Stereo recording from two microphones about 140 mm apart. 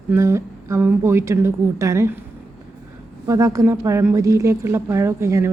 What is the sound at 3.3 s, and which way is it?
Speech, 20° right (ahead or behind).